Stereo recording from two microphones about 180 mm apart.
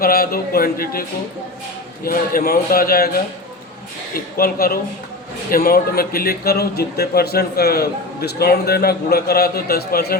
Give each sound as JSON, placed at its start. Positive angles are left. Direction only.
{"t": 0.0, "sound": "speech", "side_deg": 55}
{"t": 2.0, "sound": "speech", "side_deg": 55}
{"t": 4.1, "sound": "speech", "side_deg": 55}